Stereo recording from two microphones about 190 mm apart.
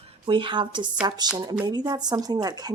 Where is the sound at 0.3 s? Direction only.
25° right (ahead or behind).